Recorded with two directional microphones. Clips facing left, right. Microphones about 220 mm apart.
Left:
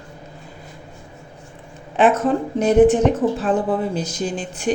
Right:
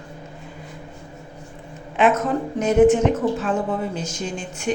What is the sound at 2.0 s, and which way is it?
A woman's voice, 35° left (ahead or behind).